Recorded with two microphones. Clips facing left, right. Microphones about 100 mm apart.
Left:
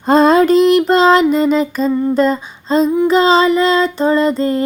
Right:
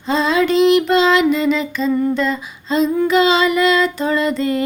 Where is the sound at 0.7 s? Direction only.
40° left (ahead or behind).